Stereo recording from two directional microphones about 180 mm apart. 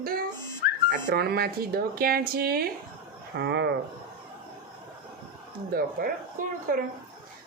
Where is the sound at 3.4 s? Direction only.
70° right (ahead or behind).